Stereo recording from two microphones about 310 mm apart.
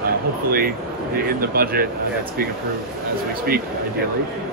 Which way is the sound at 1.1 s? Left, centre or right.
Right.